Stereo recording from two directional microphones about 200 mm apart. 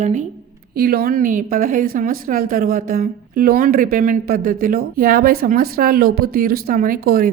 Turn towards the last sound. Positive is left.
turn(degrees=-50)  # may be behind; listen again after turning